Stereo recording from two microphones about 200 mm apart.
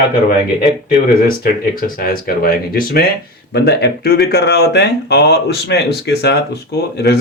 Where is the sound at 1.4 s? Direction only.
45° left (ahead or behind).